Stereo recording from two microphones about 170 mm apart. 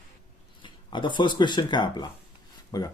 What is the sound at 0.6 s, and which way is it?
Speech, 30° left (ahead or behind).